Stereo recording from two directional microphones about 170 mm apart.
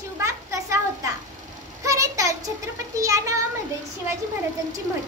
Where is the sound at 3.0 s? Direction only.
20° right (ahead or behind).